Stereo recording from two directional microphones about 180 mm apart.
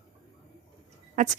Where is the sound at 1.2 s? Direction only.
45° right (ahead or behind).